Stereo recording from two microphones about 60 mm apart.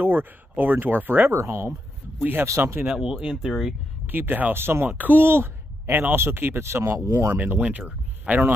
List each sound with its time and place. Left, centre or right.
0.0 s speech: right
1.3 s speech: right
2.4 s speech: right
2.9 s speech: centre
4.1 s speech: right
4.8 s speech: right
7.3 s speech: right